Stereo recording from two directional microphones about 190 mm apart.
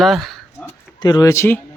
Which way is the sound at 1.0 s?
20° left (ahead or behind).